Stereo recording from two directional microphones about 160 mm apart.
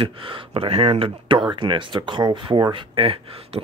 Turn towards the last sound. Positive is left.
turn(degrees=-35)  # may be behind; listen again after turning